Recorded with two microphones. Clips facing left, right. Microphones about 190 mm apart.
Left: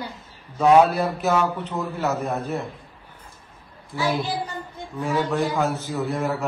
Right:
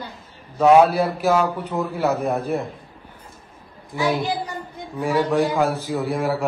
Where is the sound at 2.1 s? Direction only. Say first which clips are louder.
Right 4 dB; 55° right (ahead or behind).